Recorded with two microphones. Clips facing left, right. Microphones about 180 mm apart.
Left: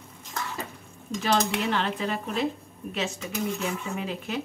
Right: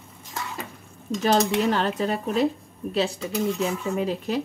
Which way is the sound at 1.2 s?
40° right (ahead or behind).